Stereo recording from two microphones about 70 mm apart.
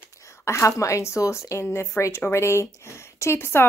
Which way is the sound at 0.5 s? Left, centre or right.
Left.